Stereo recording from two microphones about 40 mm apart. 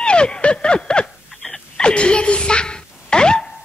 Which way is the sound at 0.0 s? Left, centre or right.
Left.